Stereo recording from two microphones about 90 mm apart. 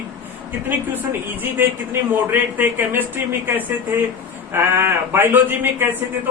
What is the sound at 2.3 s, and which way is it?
A man's voice, 20° right (ahead or behind).